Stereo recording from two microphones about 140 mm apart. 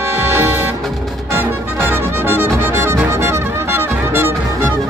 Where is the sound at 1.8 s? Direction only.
15° right (ahead or behind).